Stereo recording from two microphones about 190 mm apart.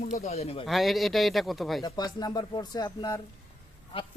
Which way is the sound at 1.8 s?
20° left (ahead or behind).